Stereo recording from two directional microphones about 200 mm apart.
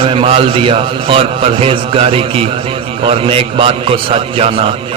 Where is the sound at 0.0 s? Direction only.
30° right (ahead or behind).